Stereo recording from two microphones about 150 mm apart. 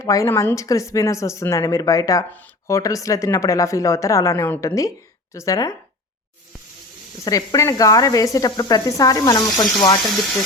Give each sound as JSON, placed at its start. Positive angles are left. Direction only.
{"t": 0.0, "sound": "speech", "side_deg": 20}
{"t": 7.3, "sound": "speech", "side_deg": 25}
{"t": 10.0, "sound": "speech", "side_deg": 0}